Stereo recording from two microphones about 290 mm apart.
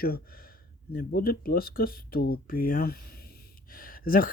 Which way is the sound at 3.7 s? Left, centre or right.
Left.